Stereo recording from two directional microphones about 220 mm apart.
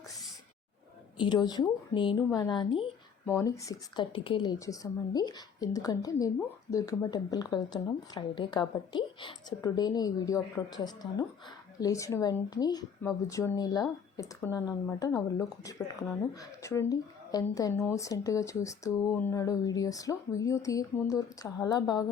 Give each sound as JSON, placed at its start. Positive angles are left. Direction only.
{"t": 1.2, "sound": "a woman's voice", "side_deg": 20}